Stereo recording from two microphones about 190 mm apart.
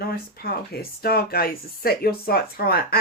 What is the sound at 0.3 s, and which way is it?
Speech, 55° left (ahead or behind).